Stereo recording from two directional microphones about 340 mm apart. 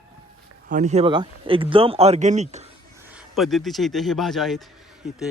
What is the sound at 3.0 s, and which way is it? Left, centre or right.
Speech, centre.